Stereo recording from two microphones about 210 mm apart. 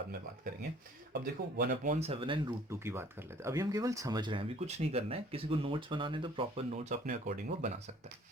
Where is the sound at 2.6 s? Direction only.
10° right (ahead or behind); by 8.1 s 30° right (ahead or behind).